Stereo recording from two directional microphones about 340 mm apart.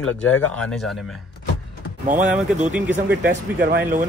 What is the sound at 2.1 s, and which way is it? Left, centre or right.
Speech, centre.